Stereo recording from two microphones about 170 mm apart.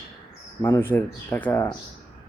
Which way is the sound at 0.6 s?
10° left (ahead or behind).